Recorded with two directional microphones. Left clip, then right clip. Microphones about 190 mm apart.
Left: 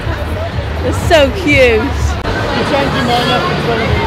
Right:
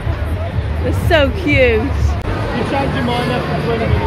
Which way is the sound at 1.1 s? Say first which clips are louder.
Left 4 dB; 5° left (ahead or behind).